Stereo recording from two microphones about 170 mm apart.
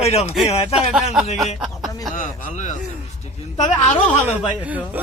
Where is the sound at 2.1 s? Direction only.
50° left (ahead or behind).